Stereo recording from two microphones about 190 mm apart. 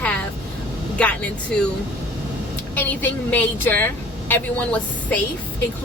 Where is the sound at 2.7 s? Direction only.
10° left (ahead or behind).